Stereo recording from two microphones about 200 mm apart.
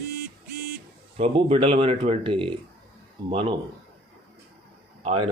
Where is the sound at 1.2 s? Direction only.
30° right (ahead or behind).